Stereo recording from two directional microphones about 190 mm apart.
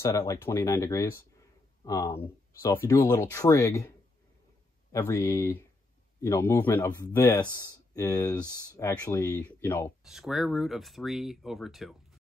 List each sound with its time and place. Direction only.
0.0 s speech: 15° left (ahead or behind)
4.9 s speech: 15° left (ahead or behind)
10.0 s speech: centre (ahead or behind)